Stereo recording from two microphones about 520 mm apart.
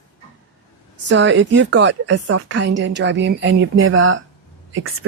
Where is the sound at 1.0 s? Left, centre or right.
Right.